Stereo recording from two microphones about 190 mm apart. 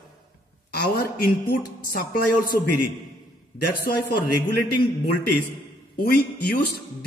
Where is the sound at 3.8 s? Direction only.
55° left (ahead or behind).